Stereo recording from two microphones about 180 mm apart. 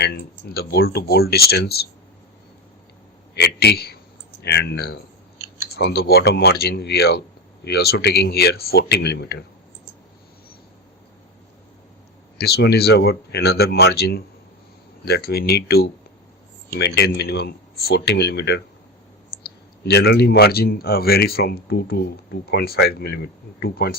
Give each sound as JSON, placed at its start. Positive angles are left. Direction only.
{"t": 0.0, "sound": "speech", "side_deg": 60}
{"t": 3.3, "sound": "speech", "side_deg": 65}
{"t": 12.4, "sound": "speech", "side_deg": 65}